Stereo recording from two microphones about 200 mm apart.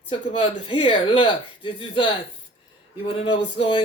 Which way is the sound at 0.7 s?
25° left (ahead or behind).